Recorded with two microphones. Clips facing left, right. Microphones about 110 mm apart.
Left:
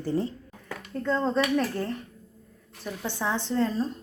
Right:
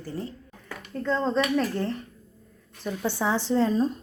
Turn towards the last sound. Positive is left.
turn(degrees=-15)  # may be behind; listen again after turning